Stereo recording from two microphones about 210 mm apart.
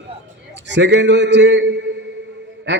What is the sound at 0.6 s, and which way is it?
A man's voice, 60° right (ahead or behind).